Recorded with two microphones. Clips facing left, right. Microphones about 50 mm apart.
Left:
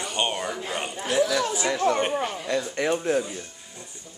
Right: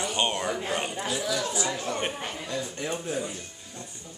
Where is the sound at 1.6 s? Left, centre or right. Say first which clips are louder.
Left 7 dB; left.